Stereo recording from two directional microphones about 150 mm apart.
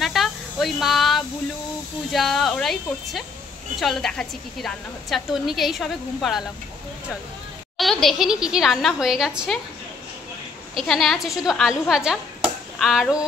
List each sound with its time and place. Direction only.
0.0 s a sound: centre (ahead or behind)
2.1 s a woman's voice: centre (ahead or behind)
7.7 s a woman's voice: centre (ahead or behind)
10.7 s a woman's voice: centre (ahead or behind)